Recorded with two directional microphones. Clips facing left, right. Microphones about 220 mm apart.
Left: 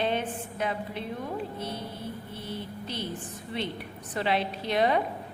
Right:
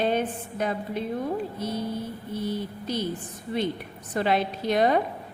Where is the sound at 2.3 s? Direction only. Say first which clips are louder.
Right 7 dB; 40° right (ahead or behind).